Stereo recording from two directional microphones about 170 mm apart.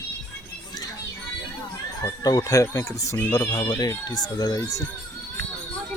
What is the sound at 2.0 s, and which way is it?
Speech, 25° left (ahead or behind).